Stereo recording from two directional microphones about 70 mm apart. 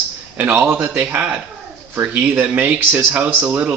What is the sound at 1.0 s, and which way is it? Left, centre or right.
Speech, centre.